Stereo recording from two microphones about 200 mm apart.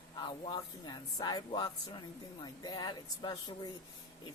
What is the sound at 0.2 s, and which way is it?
Speech, 25° left (ahead or behind).